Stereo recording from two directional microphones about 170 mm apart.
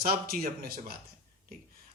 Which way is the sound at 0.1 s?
60° right (ahead or behind).